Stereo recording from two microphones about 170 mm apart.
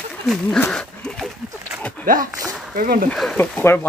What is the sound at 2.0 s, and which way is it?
Speech, 55° right (ahead or behind).